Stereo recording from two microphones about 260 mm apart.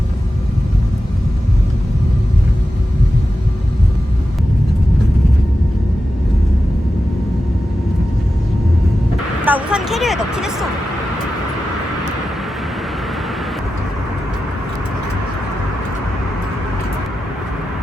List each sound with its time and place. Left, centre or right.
9.4 s vehicle: centre